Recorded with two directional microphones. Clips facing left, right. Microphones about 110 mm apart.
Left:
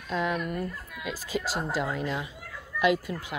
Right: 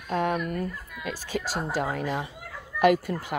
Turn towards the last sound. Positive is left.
turn(degrees=-50)  # may be behind; listen again after turning